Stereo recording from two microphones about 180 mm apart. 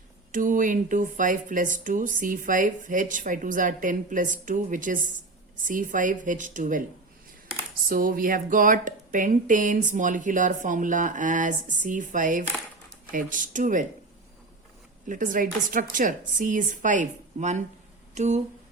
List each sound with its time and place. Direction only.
0.3 s speech: 45° right (ahead or behind)
7.9 s speech: 50° right (ahead or behind)
15.0 s speech: 45° right (ahead or behind)